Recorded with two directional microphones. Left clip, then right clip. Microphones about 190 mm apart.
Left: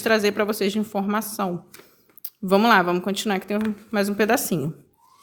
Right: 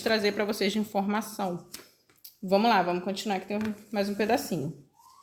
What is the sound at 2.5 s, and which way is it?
Speech, 40° left (ahead or behind).